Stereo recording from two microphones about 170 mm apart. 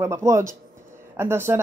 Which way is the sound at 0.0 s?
15° right (ahead or behind).